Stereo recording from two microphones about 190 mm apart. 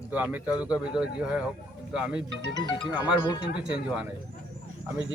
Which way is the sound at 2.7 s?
25° left (ahead or behind).